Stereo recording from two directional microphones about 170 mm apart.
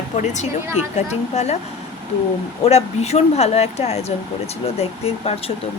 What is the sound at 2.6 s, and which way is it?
Speech, 40° left (ahead or behind).